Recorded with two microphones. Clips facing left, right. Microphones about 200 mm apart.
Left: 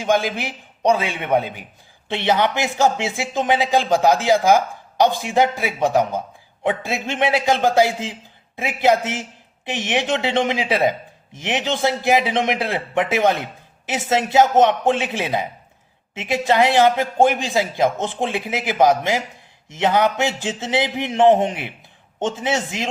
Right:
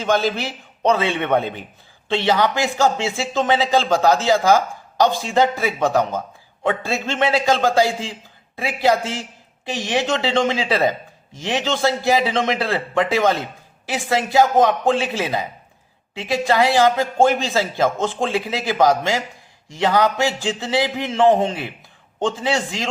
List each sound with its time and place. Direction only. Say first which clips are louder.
0.0 s a man's voice: even; 15° left (ahead or behind)